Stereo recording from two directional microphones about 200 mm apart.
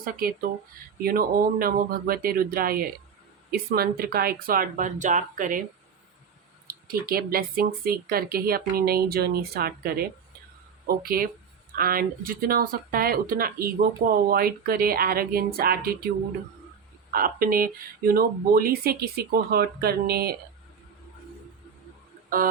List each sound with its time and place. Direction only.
0.0 s speech: 45° right (ahead or behind)
6.7 s speech: 50° right (ahead or behind)
17.1 s speech: 45° right (ahead or behind)